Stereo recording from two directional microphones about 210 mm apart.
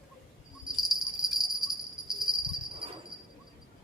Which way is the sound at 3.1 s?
25° right (ahead or behind).